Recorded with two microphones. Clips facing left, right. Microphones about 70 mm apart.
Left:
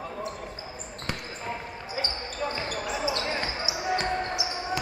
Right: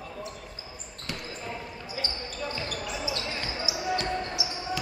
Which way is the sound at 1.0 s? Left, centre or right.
Left.